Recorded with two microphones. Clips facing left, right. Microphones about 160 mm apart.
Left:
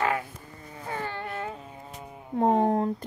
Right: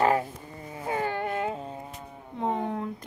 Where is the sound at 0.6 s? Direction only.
20° right (ahead or behind).